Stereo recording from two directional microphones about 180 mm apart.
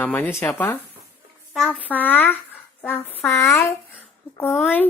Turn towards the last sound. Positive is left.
turn(degrees=10)  # may be behind; listen again after turning